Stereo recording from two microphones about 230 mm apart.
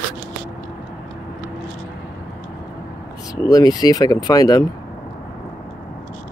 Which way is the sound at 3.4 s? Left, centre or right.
Centre.